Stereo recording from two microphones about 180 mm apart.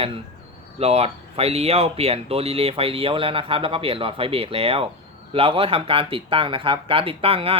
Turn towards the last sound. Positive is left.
turn(degrees=-30)  # may be behind; listen again after turning